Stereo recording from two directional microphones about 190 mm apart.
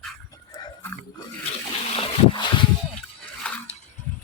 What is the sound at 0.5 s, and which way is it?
Pig, 20° left (ahead or behind).